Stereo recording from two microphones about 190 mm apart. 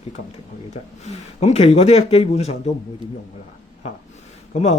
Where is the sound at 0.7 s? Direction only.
35° left (ahead or behind).